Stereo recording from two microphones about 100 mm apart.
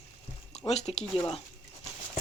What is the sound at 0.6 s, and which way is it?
Speech, 80° left.